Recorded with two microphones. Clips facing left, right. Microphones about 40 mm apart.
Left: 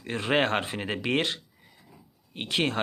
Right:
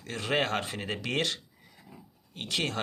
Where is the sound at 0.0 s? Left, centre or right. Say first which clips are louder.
Left 4 dB; left.